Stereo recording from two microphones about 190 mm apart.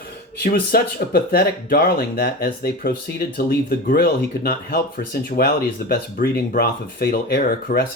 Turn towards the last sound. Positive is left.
turn(degrees=55)  # may be behind; listen again after turning